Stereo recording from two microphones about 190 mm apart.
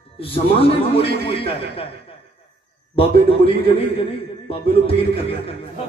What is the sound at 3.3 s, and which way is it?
Speech, 30° left (ahead or behind).